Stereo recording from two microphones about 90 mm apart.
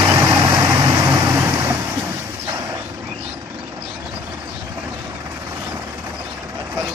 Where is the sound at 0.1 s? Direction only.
25° right (ahead or behind).